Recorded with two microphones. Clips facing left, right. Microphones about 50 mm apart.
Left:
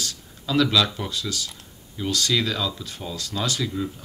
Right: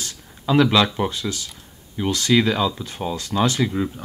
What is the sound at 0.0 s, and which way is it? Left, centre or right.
Speech, right.